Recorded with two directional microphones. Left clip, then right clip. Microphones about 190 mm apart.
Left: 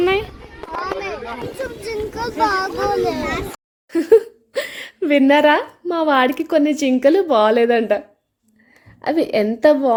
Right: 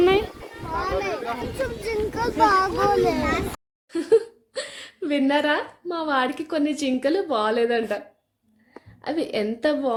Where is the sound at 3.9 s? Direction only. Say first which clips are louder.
Left 6 dB; 40° left (ahead or behind).